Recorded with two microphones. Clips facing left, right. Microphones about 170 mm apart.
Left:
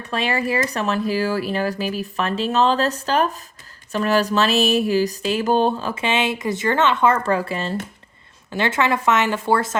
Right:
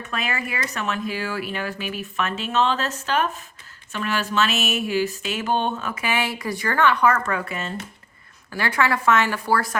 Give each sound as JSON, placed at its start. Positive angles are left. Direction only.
{"t": 0.0, "sound": "speech", "side_deg": 30}